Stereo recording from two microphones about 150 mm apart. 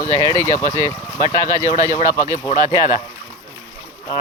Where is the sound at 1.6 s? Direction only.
20° right (ahead or behind).